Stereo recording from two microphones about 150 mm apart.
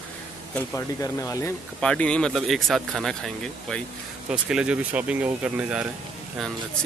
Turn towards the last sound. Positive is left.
turn(degrees=-5)  # may be behind; listen again after turning